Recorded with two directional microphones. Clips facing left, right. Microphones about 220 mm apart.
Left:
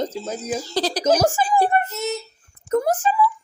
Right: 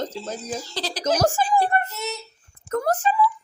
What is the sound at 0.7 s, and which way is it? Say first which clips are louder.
Speech: left 8 dB; 40° left (ahead or behind).